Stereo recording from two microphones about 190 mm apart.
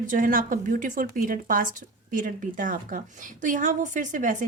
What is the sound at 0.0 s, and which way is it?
A woman's voice, 45° right (ahead or behind).